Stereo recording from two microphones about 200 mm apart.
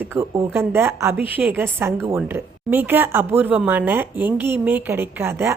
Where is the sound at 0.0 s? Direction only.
10° right (ahead or behind).